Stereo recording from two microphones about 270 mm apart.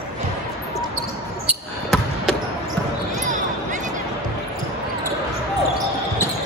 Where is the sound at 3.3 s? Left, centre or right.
Right.